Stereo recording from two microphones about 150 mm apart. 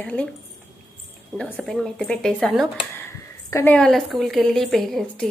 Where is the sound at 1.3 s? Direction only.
Centre (ahead or behind).